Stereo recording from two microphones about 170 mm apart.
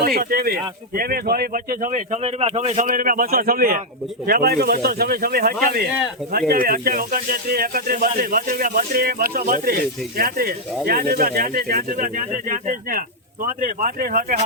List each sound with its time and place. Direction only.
0.0 s speech: 60° right (ahead or behind)